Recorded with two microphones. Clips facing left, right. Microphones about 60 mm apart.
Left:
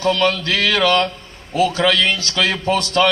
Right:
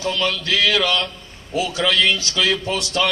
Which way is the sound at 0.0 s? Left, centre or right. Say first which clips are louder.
Left 5 dB; left.